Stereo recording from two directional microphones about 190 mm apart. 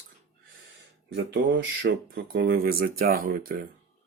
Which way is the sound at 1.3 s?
70° right (ahead or behind).